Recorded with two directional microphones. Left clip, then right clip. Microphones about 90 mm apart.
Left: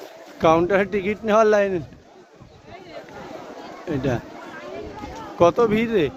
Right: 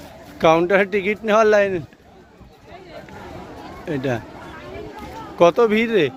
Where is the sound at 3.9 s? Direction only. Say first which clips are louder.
Right 1 dB; 30° left (ahead or behind).